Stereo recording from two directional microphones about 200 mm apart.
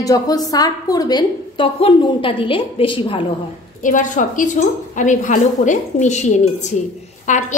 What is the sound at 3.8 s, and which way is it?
A woman's voice, 40° left (ahead or behind).